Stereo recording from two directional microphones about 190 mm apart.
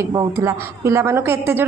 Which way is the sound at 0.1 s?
15° right (ahead or behind).